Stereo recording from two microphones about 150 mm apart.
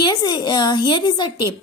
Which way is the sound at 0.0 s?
30° left (ahead or behind).